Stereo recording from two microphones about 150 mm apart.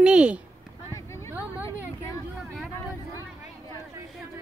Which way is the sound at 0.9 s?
20° left (ahead or behind).